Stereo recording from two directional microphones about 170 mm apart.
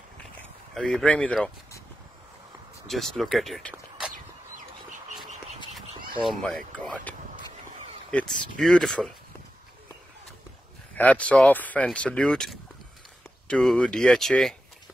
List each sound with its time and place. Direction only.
0.7 s speech: 5° left (ahead or behind)
2.9 s speech: centre (ahead or behind)
4.1 s chicken: 50° right (ahead or behind)
5.9 s a sound: 30° right (ahead or behind)
8.1 s speech: 5° left (ahead or behind)
11.0 s speech: 10° left (ahead or behind)